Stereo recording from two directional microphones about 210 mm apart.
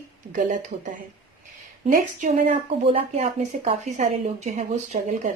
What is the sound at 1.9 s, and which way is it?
A woman's voice, 40° right (ahead or behind).